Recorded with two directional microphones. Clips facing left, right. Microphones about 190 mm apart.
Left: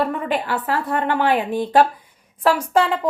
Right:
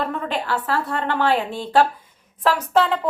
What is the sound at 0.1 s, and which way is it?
A woman's voice, 15° left (ahead or behind).